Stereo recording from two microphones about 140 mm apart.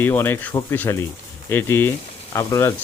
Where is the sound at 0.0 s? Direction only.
15° left (ahead or behind).